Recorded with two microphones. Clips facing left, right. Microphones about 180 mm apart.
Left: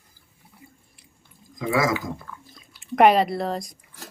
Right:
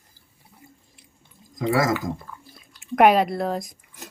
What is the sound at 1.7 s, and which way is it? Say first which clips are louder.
Speech: even; 50° right (ahead or behind).